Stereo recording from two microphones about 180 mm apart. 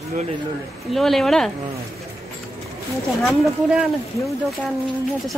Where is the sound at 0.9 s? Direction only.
Centre (ahead or behind).